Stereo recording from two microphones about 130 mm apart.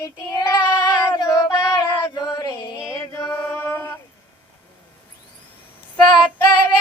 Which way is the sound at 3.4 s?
15° left (ahead or behind).